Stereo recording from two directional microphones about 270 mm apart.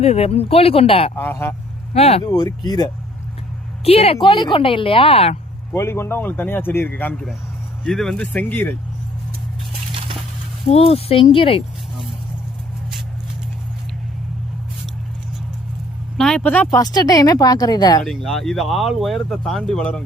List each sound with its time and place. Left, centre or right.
0.0 s a woman's voice: left
1.2 s speech: centre
1.9 s a woman's voice: left
5.7 s speech: centre
10.7 s a woman's voice: left
16.1 s speech: centre
18.0 s speech: centre